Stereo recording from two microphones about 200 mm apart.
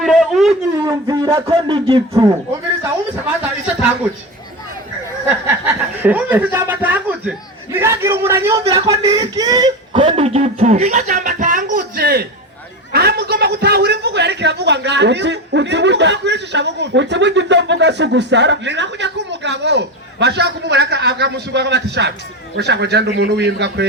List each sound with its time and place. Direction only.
0.0 s a sound: centre (ahead or behind)
0.8 s speech: 20° right (ahead or behind)
3.4 s speech: 5° right (ahead or behind)
5.5 s a man's voice: 10° right (ahead or behind); by 23.8 s 60° right (ahead or behind)